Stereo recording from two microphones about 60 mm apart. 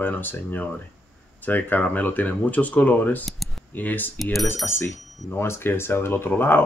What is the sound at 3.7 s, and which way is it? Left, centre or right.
Speech, left.